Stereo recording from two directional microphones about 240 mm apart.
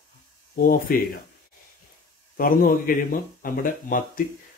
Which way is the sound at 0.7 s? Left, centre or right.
Left.